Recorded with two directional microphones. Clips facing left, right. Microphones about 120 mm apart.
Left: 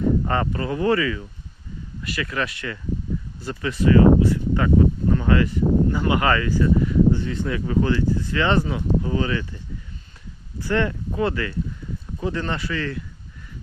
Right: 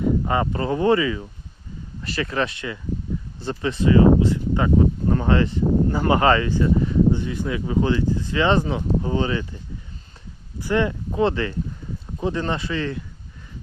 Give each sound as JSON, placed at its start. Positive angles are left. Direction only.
{"t": 0.5, "sound": "speech", "side_deg": -30}
{"t": 5.0, "sound": "speech", "side_deg": -35}
{"t": 7.1, "sound": "speech", "side_deg": -15}
{"t": 10.6, "sound": "speech", "side_deg": -15}